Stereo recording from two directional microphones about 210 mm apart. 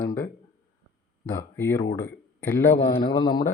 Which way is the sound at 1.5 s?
10° left (ahead or behind).